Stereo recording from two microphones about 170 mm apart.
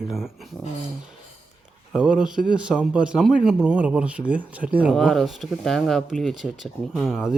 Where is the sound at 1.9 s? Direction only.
5° right (ahead or behind).